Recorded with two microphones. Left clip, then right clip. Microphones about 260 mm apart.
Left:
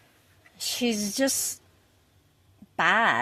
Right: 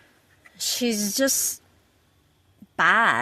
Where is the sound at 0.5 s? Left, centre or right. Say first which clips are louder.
Right 2 dB; centre.